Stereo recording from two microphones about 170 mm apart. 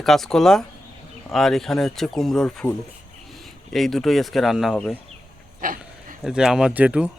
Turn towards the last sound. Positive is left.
turn(degrees=-5)  # may be behind; listen again after turning